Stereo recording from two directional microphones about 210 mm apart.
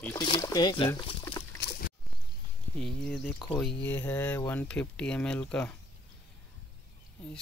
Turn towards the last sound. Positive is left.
turn(degrees=5)  # may be behind; listen again after turning